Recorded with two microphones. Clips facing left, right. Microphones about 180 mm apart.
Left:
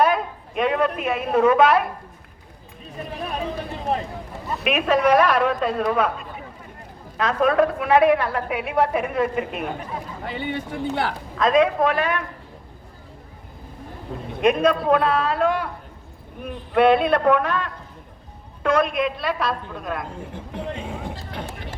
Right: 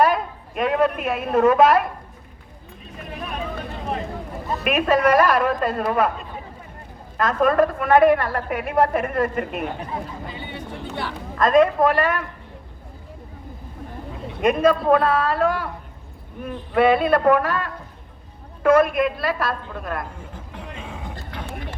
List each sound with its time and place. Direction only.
0.0 s a woman's voice: centre (ahead or behind)
4.6 s a woman's voice: centre (ahead or behind)
7.2 s a woman's voice: centre (ahead or behind)
10.2 s speech: 80° left
11.3 s a woman's voice: centre (ahead or behind)
14.4 s a woman's voice: centre (ahead or behind)
16.7 s a woman's voice: centre (ahead or behind)
20.3 s speech: 30° left (ahead or behind)